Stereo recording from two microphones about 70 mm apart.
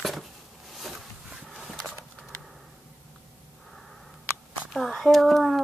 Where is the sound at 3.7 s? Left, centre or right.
Centre.